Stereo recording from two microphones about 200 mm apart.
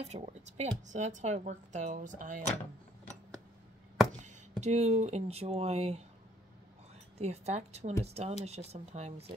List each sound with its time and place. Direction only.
0.0 s speech: 35° right (ahead or behind)
4.2 s speech: 35° right (ahead or behind)
7.2 s speech: 35° right (ahead or behind)